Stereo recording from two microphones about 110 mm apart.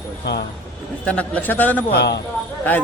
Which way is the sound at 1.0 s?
10° left (ahead or behind).